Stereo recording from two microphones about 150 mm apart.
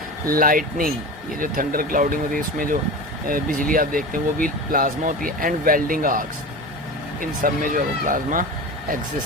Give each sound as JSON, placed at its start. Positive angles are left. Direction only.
{"t": 0.3, "sound": "speech", "side_deg": -70}